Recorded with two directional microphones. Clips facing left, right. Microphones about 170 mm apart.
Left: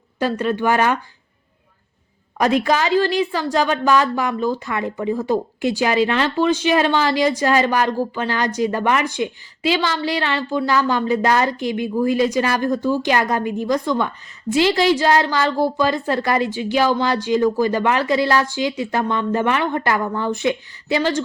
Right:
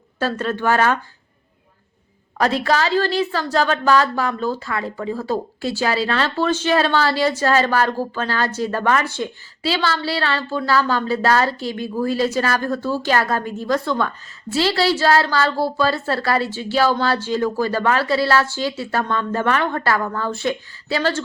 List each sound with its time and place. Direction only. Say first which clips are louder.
0.2 s a woman's voice: left 2 dB; 15° left (ahead or behind)
2.4 s a woman's voice: left 1 dB; 15° left (ahead or behind)